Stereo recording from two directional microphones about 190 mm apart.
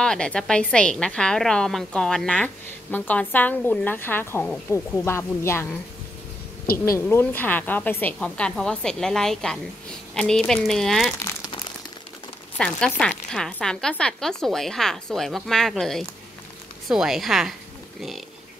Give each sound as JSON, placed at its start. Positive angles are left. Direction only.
{"t": 0.0, "sound": "a woman's voice", "side_deg": 5}
{"t": 6.8, "sound": "a woman's voice", "side_deg": 15}
{"t": 11.2, "sound": "crumpling", "side_deg": 20}
{"t": 12.5, "sound": "a woman's voice", "side_deg": 5}